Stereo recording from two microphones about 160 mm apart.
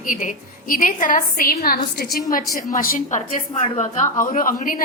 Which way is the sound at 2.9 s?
45° left (ahead or behind).